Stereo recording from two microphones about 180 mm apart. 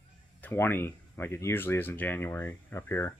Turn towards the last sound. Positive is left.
turn(degrees=15)  # may be behind; listen again after turning